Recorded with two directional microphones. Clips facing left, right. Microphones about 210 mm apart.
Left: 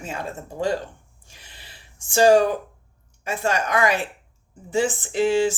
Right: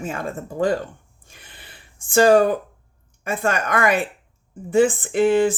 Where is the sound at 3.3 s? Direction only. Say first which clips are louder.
Right 1 dB; 55° right (ahead or behind).